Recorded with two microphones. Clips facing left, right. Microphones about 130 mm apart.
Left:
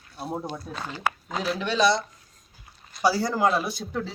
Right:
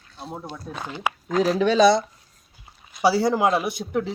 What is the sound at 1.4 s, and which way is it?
Speech, 40° right (ahead or behind).